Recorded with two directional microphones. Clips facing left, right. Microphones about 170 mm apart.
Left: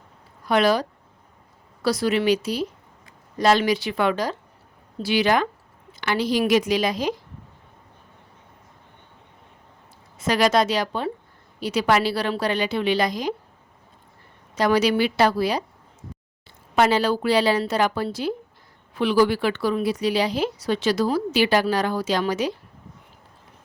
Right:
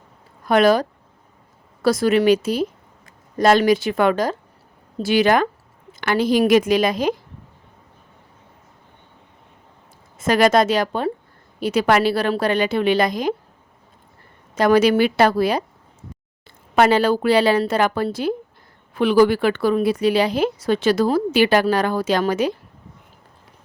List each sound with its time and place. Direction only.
0.4 s a woman's voice: 50° right (ahead or behind)
10.2 s a woman's voice: 50° right (ahead or behind)
14.5 s a woman's voice: 50° right (ahead or behind)
16.7 s a woman's voice: 55° right (ahead or behind)